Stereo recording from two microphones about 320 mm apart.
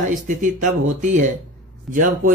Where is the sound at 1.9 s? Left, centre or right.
Right.